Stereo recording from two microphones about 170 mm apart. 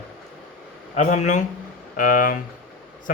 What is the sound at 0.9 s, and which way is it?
Speech, 45° left (ahead or behind).